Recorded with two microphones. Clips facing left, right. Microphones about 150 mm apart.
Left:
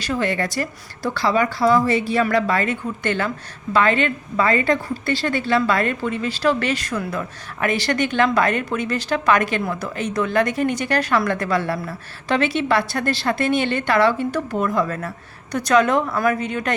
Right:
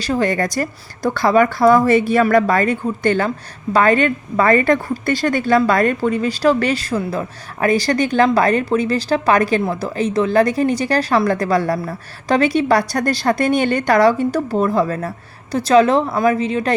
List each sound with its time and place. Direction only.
0.0 s a woman's voice: 40° right (ahead or behind)